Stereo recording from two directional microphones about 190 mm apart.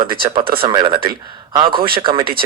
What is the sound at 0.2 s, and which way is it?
Speech, 30° right (ahead or behind).